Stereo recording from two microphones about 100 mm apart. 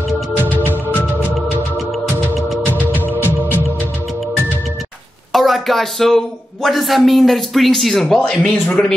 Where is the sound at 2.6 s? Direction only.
20° left (ahead or behind).